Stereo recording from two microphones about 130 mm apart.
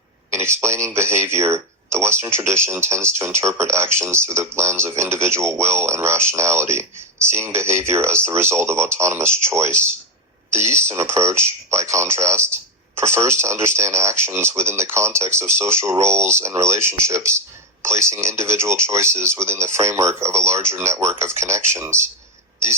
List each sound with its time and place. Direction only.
0.3 s speech: 20° right (ahead or behind)